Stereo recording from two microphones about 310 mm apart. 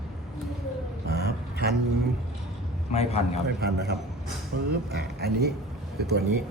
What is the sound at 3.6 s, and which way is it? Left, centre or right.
Speech, right.